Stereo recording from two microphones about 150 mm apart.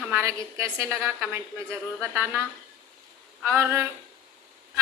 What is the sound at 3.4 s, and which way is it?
Speech, 15° right (ahead or behind).